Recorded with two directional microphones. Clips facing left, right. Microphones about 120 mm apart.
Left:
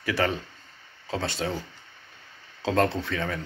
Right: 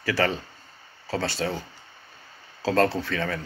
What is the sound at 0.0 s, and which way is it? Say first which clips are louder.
Speech: right 1 dB; 20° left (ahead or behind).